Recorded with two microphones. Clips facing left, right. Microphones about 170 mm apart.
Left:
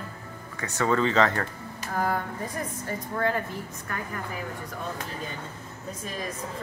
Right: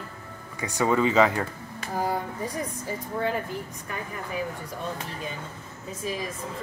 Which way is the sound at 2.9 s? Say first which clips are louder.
Left 1 dB; 10° right (ahead or behind).